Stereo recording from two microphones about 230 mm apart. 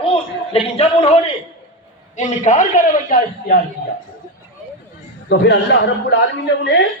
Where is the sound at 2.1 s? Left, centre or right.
Left.